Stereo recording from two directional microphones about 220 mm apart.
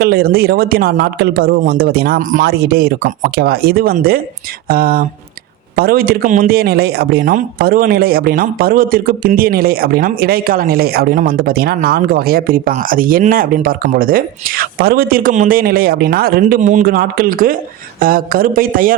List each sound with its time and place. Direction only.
0.0 s speech: 45° right (ahead or behind)